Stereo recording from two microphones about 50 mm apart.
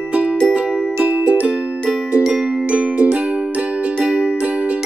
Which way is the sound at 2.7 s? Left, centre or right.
Right.